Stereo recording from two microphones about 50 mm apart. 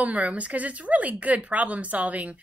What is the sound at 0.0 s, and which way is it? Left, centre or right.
Speech, right.